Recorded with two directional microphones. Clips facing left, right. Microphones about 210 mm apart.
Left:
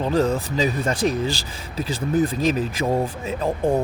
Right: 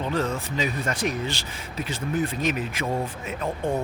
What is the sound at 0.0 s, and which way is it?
Speech, 35° left (ahead or behind).